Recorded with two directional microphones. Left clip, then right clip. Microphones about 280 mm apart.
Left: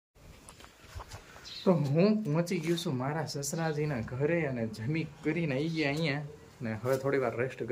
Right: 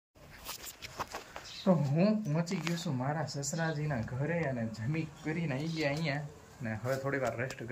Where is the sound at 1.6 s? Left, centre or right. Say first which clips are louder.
Left 3 dB; centre.